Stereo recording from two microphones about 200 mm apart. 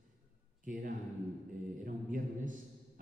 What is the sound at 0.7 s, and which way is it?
A man's voice, 45° right (ahead or behind).